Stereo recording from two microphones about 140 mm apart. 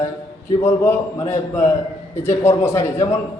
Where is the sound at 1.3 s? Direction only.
20° left (ahead or behind).